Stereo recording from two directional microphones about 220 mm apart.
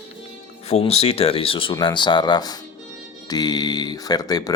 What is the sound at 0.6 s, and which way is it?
Speech, 30° left (ahead or behind).